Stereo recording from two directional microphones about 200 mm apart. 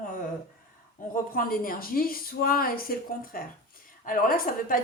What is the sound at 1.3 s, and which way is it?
A woman's voice, 45° left (ahead or behind).